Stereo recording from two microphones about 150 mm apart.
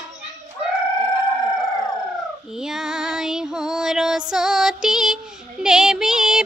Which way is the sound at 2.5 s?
5° right (ahead or behind).